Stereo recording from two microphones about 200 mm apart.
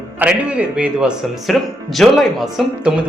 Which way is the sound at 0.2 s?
5° right (ahead or behind).